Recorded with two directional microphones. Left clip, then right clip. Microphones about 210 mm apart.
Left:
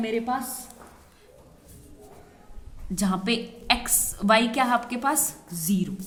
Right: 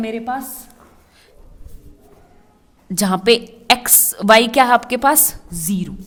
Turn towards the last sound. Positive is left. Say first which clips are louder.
# right 4 dB
turn(degrees=-45)  # may be behind; listen again after turning